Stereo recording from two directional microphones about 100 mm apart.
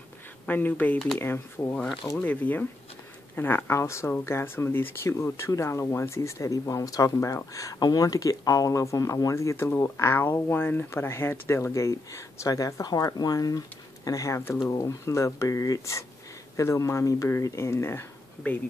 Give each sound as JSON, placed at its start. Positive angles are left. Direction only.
{"t": 0.5, "sound": "speech", "side_deg": 20}
{"t": 1.6, "sound": "speech", "side_deg": 35}
{"t": 2.2, "sound": "speech", "side_deg": 15}